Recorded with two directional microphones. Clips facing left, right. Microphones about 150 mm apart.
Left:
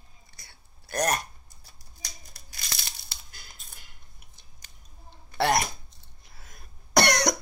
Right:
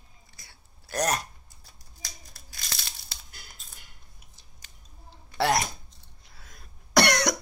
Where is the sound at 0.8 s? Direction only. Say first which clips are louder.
Left 1 dB; 55° left (ahead or behind).